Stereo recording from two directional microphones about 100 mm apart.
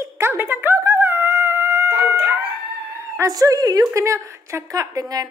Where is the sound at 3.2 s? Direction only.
35° right (ahead or behind).